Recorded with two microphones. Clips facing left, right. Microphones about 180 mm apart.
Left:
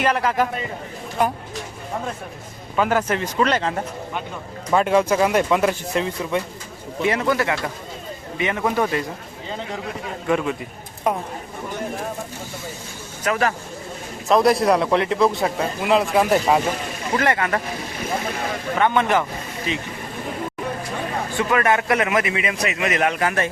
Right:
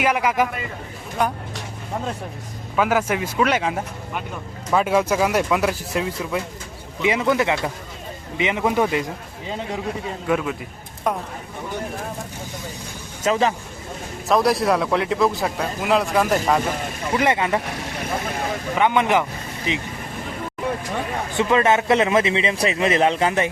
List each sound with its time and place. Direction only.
0.0 s speech: 10° right (ahead or behind)
1.2 s speech: centre (ahead or behind)
2.7 s speech: 5° right (ahead or behind)
7.0 s speech: 15° right (ahead or behind)
10.2 s speech: centre (ahead or behind)
13.2 s speech: 25° right (ahead or behind)
14.3 s speech: centre (ahead or behind)
17.2 s speech: 20° right (ahead or behind)
18.8 s speech: 15° right (ahead or behind)
21.3 s speech: 20° right (ahead or behind)